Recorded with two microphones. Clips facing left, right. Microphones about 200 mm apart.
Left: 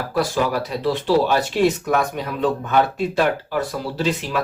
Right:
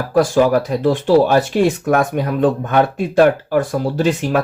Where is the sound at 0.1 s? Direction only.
50° right (ahead or behind).